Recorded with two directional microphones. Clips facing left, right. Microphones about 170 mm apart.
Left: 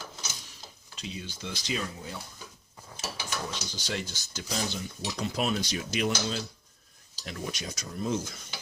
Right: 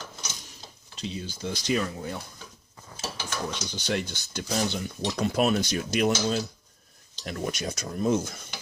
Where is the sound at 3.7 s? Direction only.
60° right (ahead or behind).